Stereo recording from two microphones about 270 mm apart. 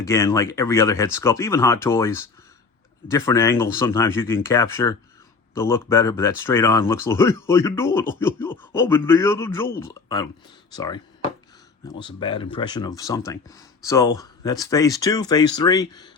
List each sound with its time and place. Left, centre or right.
0.0 s speech: centre